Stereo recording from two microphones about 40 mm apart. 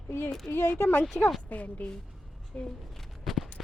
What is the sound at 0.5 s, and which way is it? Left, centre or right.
Speech, left.